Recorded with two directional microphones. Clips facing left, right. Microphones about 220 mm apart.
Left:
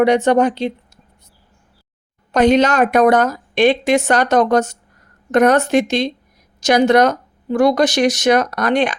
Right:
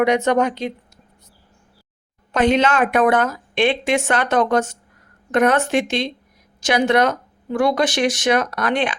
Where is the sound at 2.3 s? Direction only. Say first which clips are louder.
Left 4 dB; 40° left (ahead or behind).